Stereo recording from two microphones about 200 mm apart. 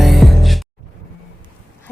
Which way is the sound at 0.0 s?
Centre (ahead or behind).